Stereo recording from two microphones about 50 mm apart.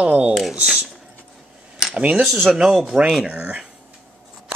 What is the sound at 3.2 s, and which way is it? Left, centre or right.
Speech, centre.